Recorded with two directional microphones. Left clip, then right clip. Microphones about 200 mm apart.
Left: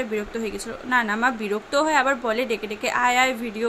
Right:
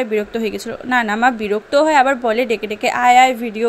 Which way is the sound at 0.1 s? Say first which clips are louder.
Right 8 dB; 30° right (ahead or behind).